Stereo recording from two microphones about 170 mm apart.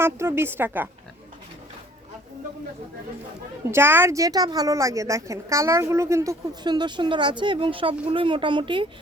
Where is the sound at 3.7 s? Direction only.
15° right (ahead or behind); by 8.8 s 30° right (ahead or behind).